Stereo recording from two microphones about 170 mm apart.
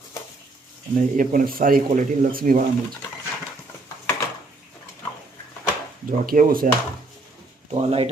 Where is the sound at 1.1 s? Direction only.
55° right (ahead or behind).